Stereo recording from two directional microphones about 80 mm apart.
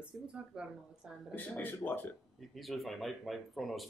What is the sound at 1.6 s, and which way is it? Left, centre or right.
Speech, left.